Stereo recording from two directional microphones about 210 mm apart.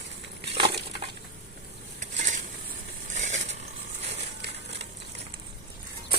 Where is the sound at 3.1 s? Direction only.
35° right (ahead or behind).